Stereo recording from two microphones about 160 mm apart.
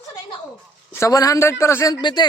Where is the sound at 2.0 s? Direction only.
25° left (ahead or behind).